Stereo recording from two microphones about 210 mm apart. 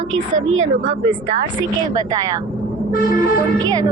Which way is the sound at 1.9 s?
15° right (ahead or behind).